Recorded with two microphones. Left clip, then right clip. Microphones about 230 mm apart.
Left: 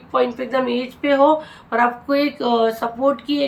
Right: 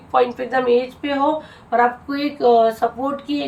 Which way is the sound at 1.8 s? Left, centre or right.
Centre.